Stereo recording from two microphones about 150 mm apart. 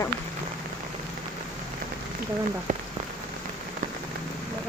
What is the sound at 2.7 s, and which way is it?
Rain on surface, 60° right (ahead or behind).